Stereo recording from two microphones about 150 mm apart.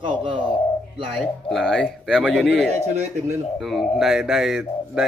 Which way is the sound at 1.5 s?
5° left (ahead or behind).